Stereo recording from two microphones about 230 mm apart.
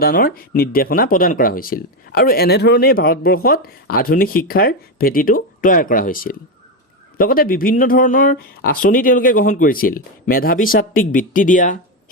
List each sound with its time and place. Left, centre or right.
0.0 s speech: left